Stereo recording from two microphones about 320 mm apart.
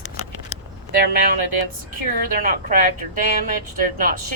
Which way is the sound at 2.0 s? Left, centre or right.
Right.